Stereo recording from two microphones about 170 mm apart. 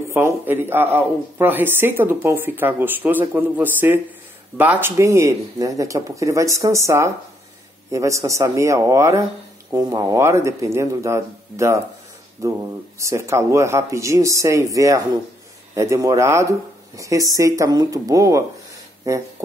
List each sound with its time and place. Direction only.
0.1 s speech: 15° right (ahead or behind)